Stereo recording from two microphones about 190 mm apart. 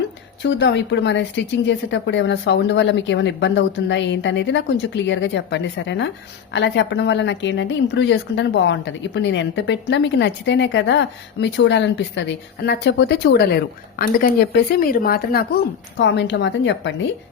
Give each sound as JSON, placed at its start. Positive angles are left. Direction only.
{"t": 0.4, "sound": "a woman's voice", "side_deg": 70}
{"t": 14.0, "sound": "speech", "side_deg": 50}
{"t": 16.0, "sound": "a woman's voice", "side_deg": 70}